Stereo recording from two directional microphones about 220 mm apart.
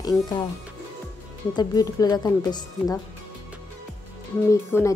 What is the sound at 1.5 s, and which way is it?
A woman's voice, 15° left (ahead or behind).